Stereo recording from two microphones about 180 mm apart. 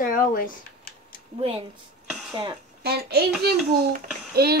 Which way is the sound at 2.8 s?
65° right (ahead or behind).